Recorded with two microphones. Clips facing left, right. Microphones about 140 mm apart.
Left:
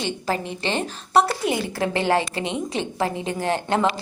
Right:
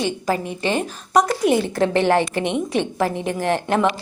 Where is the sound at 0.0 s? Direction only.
15° right (ahead or behind).